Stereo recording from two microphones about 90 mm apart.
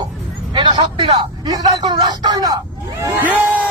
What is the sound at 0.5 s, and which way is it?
A man's voice, 60° right (ahead or behind).